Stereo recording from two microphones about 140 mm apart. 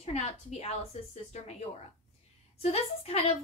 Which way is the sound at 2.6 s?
45° left (ahead or behind).